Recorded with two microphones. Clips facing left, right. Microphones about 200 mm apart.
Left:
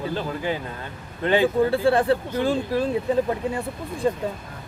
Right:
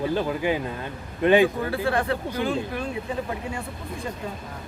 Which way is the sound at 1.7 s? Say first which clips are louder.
Left 5 dB; 30° left (ahead or behind).